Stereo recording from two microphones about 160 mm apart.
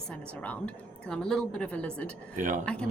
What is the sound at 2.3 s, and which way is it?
Speech, 50° right (ahead or behind).